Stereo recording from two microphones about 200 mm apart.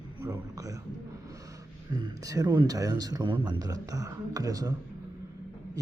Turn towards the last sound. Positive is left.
turn(degrees=-15)  # may be behind; listen again after turning